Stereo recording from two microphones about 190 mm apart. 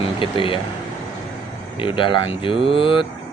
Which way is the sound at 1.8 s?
25° left (ahead or behind).